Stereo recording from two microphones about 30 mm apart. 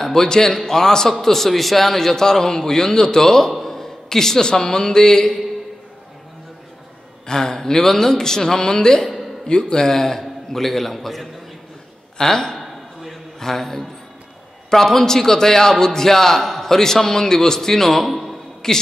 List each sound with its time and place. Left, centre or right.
0.0 s a man's voice: centre
7.2 s a woman's voice: left
10.2 s a man's voice: centre
12.2 s a woman's voice: left
12.5 s a sound: centre
13.4 s a man's voice: centre
18.6 s a woman's voice: centre